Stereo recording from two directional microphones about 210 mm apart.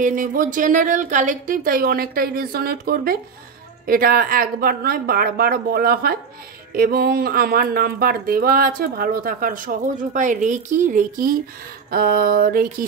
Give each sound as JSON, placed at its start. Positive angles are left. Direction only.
{"t": 0.0, "sound": "speech", "side_deg": -40}